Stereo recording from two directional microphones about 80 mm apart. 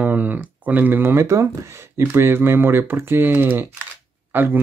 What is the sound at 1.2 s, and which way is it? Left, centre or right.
Speech, right.